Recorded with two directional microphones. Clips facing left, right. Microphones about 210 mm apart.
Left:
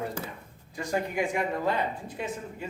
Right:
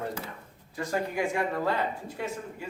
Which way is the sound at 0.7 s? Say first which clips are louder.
Left 1 dB; 15° left (ahead or behind).